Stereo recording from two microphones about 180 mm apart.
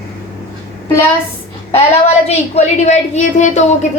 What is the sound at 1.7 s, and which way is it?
A woman's voice, 35° left (ahead or behind).